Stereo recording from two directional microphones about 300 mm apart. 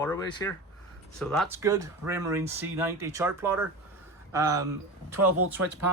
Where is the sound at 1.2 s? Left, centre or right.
Centre.